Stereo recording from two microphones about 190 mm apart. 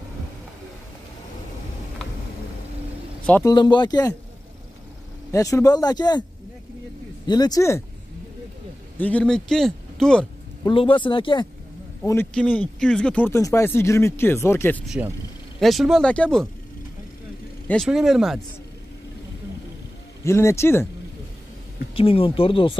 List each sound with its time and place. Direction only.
3.4 s speech: 25° left (ahead or behind)
5.3 s speech: 15° left (ahead or behind)
7.2 s speech: 20° left (ahead or behind)
8.9 s a man's voice: 10° left (ahead or behind)
10.6 s speech: 25° left (ahead or behind)
12.0 s speech: 10° left (ahead or behind)
14.9 s speech: 10° right (ahead or behind)
17.6 s speech: centre (ahead or behind)
20.2 s speech: 15° left (ahead or behind)
21.9 s speech: 30° left (ahead or behind)